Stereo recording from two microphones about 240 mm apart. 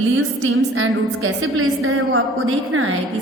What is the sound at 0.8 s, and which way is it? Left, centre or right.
A woman's voice, right.